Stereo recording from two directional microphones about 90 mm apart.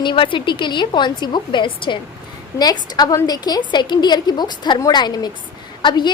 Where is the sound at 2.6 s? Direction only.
50° left (ahead or behind).